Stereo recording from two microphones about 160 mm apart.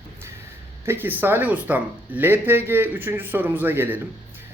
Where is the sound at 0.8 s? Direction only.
15° right (ahead or behind).